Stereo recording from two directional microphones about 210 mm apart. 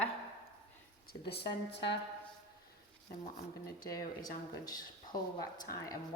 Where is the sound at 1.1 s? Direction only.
50° left (ahead or behind).